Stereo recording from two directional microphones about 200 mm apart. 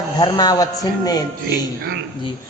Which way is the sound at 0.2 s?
20° left (ahead or behind).